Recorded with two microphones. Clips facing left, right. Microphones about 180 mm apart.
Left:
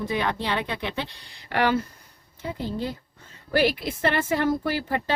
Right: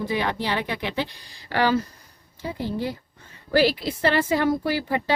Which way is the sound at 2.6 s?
15° right (ahead or behind).